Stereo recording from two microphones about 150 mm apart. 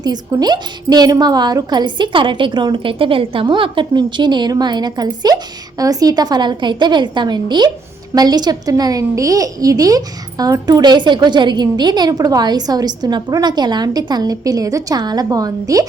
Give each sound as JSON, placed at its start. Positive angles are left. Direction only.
{"t": 0.0, "sound": "a woman's voice", "side_deg": -25}